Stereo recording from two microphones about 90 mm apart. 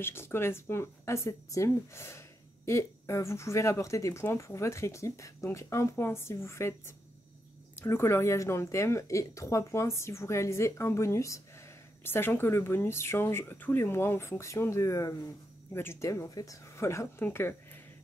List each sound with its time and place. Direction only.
0.0 s speech: 25° left (ahead or behind)
12.0 s speech: 25° left (ahead or behind)